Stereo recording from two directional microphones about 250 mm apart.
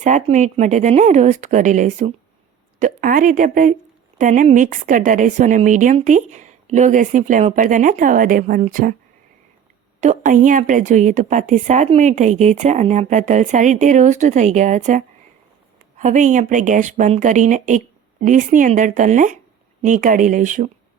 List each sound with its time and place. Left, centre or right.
0.0 s a woman's voice: right
10.0 s a woman's voice: right